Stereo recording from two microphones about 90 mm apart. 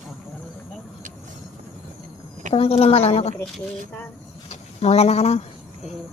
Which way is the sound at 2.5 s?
90° left.